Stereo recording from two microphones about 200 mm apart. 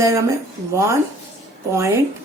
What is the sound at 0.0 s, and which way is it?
Speech, 15° right (ahead or behind).